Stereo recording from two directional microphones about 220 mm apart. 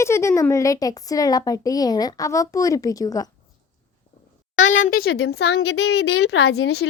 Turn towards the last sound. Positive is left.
turn(degrees=70)  # may be behind; listen again after turning